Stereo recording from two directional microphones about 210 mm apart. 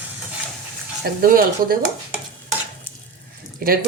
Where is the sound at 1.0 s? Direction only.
45° right (ahead or behind).